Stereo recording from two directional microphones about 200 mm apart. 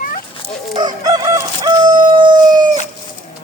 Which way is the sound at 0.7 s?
20° right (ahead or behind).